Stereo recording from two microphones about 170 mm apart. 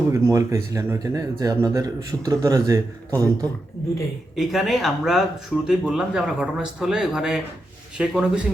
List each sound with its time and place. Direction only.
0.1 s speech: 20° right (ahead or behind)
4.4 s speech: centre (ahead or behind)